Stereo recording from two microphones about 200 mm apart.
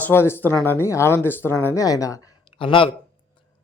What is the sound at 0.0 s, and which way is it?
Speech, 10° left (ahead or behind).